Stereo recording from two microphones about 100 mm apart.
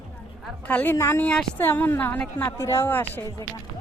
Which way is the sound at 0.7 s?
20° left (ahead or behind).